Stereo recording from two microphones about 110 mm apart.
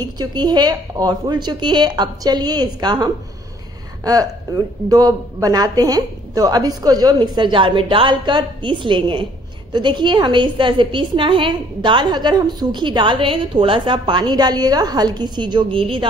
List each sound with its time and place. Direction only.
0.2 s a woman's voice: 40° right (ahead or behind)